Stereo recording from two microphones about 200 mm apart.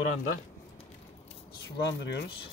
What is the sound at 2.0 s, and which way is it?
Speech, 60° left (ahead or behind).